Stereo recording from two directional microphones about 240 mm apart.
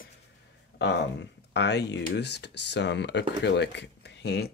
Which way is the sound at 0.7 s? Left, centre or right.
Left.